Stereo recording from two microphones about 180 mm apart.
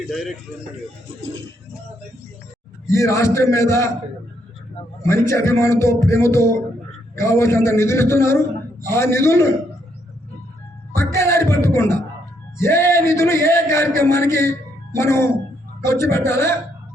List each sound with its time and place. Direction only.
0.1 s a man's voice: centre (ahead or behind)
2.9 s a man's voice: 15° left (ahead or behind)
5.0 s a man's voice: 15° left (ahead or behind)
10.9 s a man's voice: 15° left (ahead or behind)